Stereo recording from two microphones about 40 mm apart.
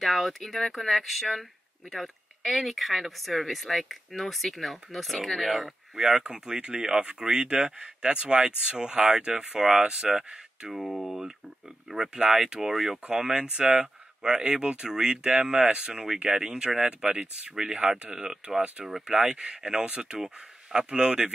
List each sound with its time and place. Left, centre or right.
0.0 s speech: centre
6.0 s speech: right; by 11.0 s centre
12.1 s speech: right
12.7 s speech: centre
13.3 s speech: right
18.1 s speech: centre
19.2 s speech: right